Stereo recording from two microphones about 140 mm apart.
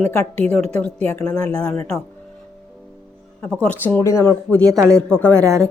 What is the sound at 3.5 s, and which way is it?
Speech, 10° left (ahead or behind).